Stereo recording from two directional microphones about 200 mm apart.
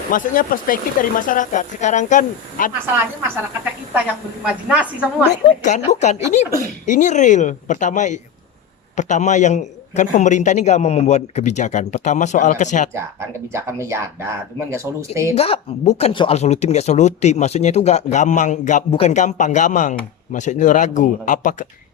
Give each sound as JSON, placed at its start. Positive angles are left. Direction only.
{"t": 0.1, "sound": "a man's voice", "side_deg": 40}
{"t": 2.8, "sound": "speech", "side_deg": -10}
{"t": 5.5, "sound": "a man's voice", "side_deg": 35}
{"t": 12.9, "sound": "speech", "side_deg": -15}
{"t": 15.4, "sound": "a man's voice", "side_deg": 30}